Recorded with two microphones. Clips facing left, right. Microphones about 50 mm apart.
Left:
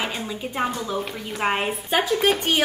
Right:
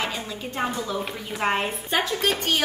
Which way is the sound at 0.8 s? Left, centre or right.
Centre.